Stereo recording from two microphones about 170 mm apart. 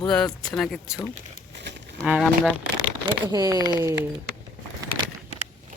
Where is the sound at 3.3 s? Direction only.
20° right (ahead or behind).